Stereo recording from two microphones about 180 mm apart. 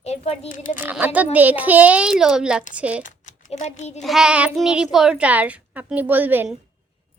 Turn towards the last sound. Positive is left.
turn(degrees=-10)  # may be behind; listen again after turning